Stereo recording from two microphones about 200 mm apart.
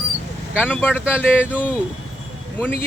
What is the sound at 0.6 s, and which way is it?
Speech, 10° left (ahead or behind).